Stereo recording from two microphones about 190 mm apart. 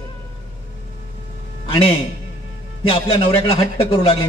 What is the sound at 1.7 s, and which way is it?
A man's voice, 30° left (ahead or behind).